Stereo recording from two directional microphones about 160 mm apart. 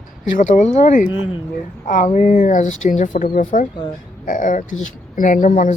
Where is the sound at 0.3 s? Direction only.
50° left (ahead or behind).